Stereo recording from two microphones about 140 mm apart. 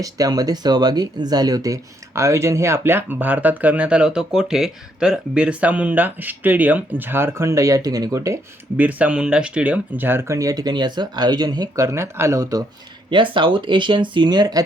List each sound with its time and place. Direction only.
0.0 s speech: 25° right (ahead or behind)
8.8 s speech: 10° right (ahead or behind)
13.1 s speech: 35° right (ahead or behind)